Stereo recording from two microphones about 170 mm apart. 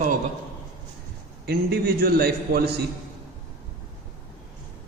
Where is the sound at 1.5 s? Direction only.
70° right (ahead or behind).